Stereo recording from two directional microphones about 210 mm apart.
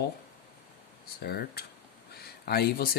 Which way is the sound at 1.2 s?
50° left (ahead or behind).